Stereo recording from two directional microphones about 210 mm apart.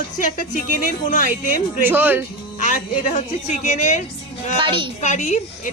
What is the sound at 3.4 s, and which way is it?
Speech, 35° left (ahead or behind).